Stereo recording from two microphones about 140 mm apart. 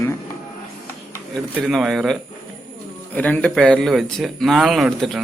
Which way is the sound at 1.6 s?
Centre (ahead or behind).